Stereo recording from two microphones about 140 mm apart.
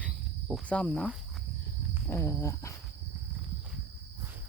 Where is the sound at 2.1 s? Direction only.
20° left (ahead or behind).